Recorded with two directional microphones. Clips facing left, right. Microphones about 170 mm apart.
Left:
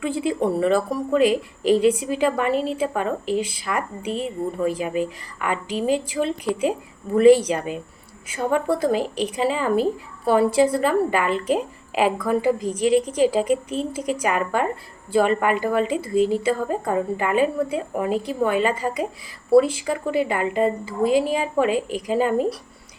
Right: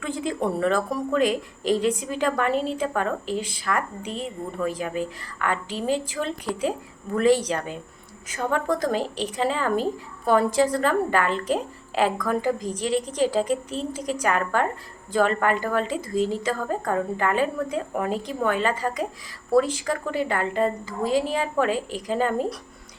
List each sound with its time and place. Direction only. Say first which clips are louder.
0.0 s a woman's voice: left 4 dB; 5° left (ahead or behind)